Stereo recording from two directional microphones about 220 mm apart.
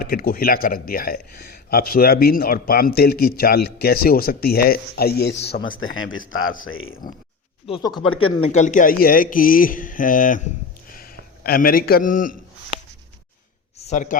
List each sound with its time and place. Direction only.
0.0 s speech: 40° left (ahead or behind)
5.8 s speech: 65° left (ahead or behind)
7.7 s speech: 20° left (ahead or behind)
8.2 s speech: 30° left (ahead or behind)
13.7 s a sound: 30° left (ahead or behind)